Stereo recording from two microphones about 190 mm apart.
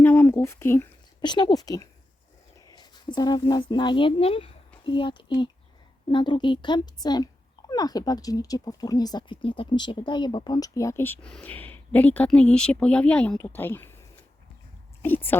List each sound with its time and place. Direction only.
0.0 s a woman's voice: 10° left (ahead or behind)